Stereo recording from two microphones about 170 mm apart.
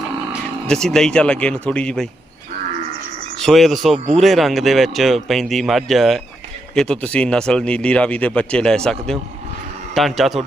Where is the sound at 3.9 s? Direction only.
40° right (ahead or behind).